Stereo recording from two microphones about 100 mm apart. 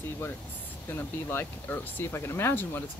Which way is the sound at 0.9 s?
20° left (ahead or behind).